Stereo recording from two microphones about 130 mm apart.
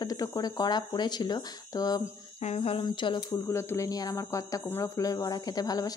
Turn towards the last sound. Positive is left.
turn(degrees=30)  # may be behind; listen again after turning